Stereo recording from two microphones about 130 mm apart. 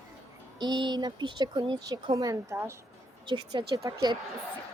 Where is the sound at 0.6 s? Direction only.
35° right (ahead or behind).